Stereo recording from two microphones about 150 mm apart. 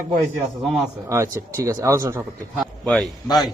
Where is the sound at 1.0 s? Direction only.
20° right (ahead or behind).